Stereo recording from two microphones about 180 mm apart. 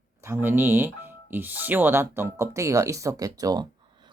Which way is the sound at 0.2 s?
10° right (ahead or behind).